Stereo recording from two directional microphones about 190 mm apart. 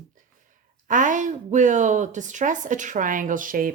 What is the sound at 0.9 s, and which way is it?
Speech, 40° right (ahead or behind).